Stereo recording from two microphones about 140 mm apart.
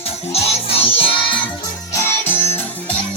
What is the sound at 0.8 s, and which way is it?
Music, 40° left (ahead or behind).